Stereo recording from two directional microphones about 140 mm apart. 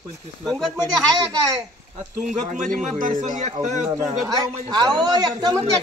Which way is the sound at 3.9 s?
25° right (ahead or behind).